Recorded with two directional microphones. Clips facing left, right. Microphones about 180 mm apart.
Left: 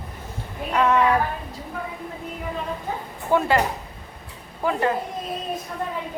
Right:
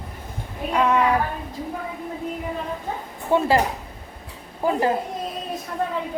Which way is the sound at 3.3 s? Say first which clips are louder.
Right 1 dB; 30° right (ahead or behind).